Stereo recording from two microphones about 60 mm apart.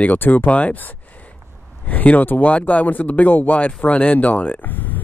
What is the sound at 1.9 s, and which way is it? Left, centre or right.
Speech, left.